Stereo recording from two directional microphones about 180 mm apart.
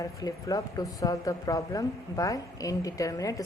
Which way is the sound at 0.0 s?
20° left (ahead or behind).